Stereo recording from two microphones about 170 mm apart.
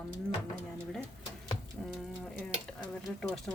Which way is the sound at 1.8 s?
5° left (ahead or behind).